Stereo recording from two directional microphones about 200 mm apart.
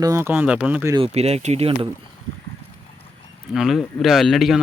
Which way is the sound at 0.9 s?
30° right (ahead or behind).